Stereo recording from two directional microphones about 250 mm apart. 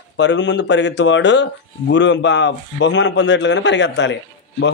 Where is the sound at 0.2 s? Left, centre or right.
Left.